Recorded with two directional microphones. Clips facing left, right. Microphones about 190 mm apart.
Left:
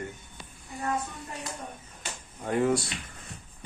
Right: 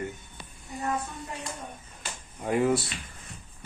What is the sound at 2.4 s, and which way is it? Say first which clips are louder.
Speech: right 1 dB; 10° right (ahead or behind).